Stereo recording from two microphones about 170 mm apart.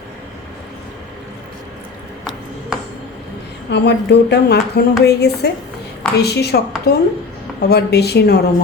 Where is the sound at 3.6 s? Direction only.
85° left.